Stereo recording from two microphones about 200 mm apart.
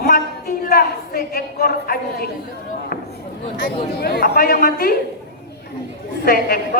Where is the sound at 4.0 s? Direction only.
55° left (ahead or behind).